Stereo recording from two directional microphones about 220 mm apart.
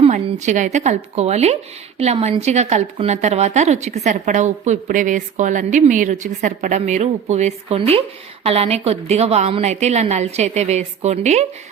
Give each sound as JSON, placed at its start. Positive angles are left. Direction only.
{"t": 0.0, "sound": "a woman's voice", "side_deg": -30}